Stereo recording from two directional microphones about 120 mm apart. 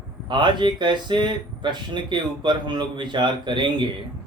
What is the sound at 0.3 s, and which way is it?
Speech, 40° right (ahead or behind).